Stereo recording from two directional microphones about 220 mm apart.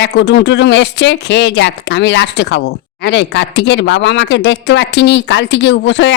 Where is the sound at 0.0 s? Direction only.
50° left (ahead or behind).